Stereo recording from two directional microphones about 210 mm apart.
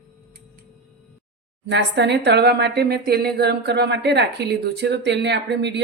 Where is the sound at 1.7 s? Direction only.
55° right (ahead or behind).